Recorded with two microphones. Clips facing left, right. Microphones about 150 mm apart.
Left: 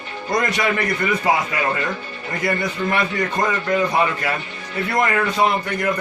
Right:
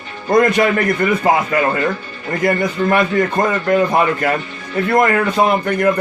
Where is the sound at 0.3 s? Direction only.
50° right (ahead or behind).